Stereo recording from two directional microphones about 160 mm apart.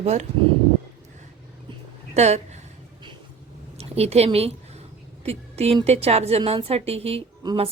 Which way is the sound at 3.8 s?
40° right (ahead or behind).